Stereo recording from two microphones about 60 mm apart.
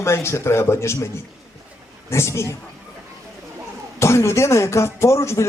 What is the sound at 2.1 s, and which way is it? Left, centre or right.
Speech, left.